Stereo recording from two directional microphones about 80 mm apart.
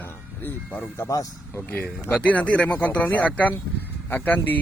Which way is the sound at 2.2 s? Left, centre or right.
Centre.